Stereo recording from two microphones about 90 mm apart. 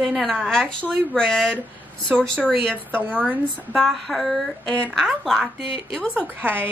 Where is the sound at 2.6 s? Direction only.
20° right (ahead or behind).